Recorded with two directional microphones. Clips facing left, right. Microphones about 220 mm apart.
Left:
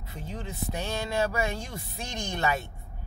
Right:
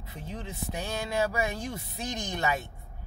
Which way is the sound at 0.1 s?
15° right (ahead or behind).